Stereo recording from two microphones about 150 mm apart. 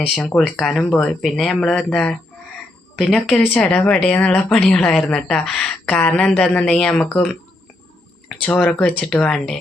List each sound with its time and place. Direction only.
0.2 s speech: 5° left (ahead or behind)
8.4 s speech: 10° left (ahead or behind)